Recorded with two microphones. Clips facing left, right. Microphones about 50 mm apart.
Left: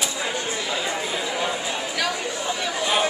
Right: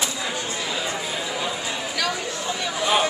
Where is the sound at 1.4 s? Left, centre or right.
Centre.